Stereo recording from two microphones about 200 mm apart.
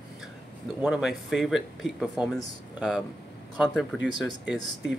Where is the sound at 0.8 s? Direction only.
5° right (ahead or behind).